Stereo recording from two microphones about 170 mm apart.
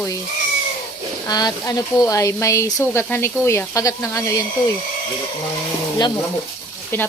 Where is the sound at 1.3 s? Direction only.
20° left (ahead or behind).